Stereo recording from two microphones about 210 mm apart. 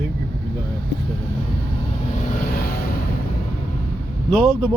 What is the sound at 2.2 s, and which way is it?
Vehicle, 40° left (ahead or behind).